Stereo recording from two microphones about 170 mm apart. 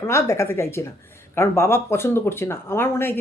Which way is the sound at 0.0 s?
15° left (ahead or behind).